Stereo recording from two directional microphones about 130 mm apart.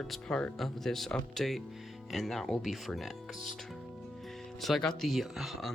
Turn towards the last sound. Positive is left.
turn(degrees=0)  # may be behind; listen again after turning